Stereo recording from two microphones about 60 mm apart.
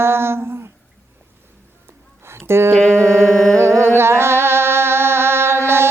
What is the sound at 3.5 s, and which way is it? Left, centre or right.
Music, right.